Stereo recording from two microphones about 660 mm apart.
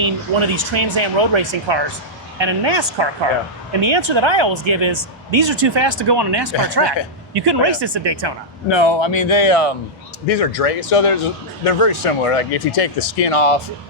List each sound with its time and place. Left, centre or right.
0.0 s speech: right
8.7 s speech: left